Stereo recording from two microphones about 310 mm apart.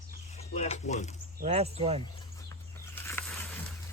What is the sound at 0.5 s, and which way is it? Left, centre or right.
Speech, left.